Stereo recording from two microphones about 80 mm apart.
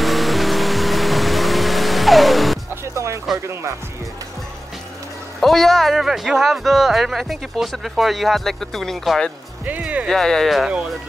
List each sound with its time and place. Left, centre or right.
0.0 s music: centre
2.7 s music: right
5.4 s speech: centre
9.7 s speech: centre
10.0 s speech: centre